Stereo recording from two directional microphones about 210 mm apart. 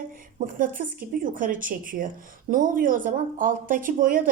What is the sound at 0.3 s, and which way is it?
Speech, 40° right (ahead or behind).